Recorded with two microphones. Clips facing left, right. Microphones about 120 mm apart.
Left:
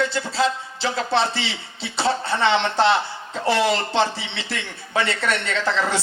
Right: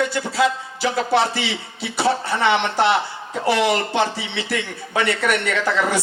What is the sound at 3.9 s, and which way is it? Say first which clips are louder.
Speech: right 1 dB; 25° left (ahead or behind).